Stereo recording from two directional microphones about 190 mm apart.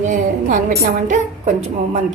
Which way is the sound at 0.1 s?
45° right (ahead or behind).